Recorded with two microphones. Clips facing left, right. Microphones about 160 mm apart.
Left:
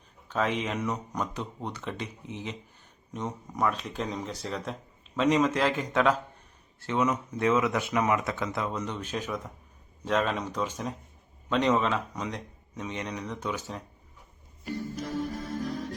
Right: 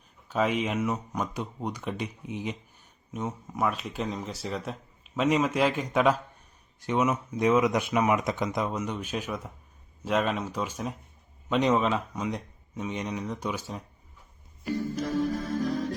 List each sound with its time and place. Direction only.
0.3 s speech: 10° right (ahead or behind)
14.6 s music: 90° right